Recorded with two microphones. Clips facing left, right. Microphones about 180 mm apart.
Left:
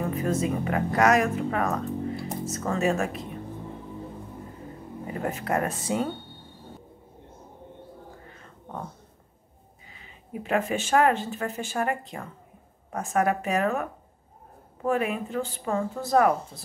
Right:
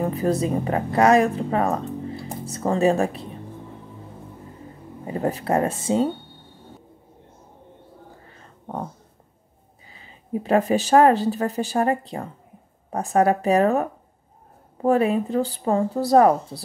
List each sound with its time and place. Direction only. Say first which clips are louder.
0.0 s speech: right 4 dB; 35° right (ahead or behind)
5.0 s speech: right 6 dB; 30° right (ahead or behind)
9.9 s speech: right 9 dB; 35° right (ahead or behind)